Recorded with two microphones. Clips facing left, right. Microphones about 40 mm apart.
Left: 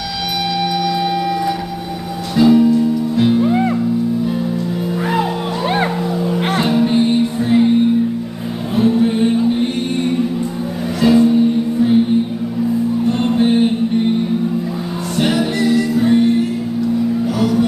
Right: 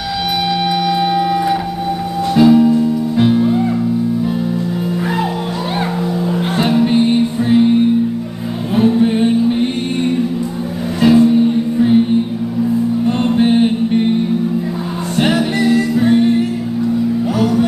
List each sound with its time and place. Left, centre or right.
0.8 s wind instrument: right
2.3 s music: centre
6.6 s music: centre
8.7 s music: centre
11.2 s music: centre
13.4 s music: centre
15.1 s music: right
17.4 s music: centre